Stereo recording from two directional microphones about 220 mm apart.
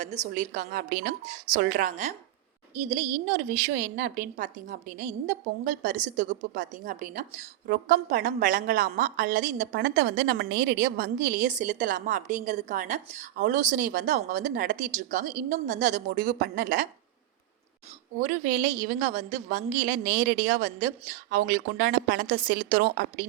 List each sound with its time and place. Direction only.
0.0 s a woman's voice: 35° right (ahead or behind)
3.7 s a woman's voice: 40° right (ahead or behind)
18.2 s a woman's voice: 40° right (ahead or behind)